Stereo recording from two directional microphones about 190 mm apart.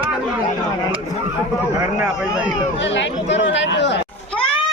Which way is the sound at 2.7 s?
70° left (ahead or behind).